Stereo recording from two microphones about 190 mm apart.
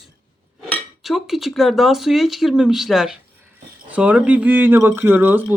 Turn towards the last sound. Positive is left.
turn(degrees=-10)  # may be behind; listen again after turning